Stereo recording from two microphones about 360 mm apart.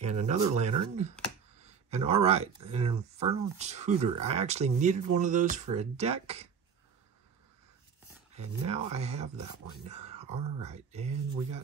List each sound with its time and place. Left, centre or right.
0.1 s speech: centre
1.6 s a sound: centre
2.6 s speech: centre
8.3 s speech: centre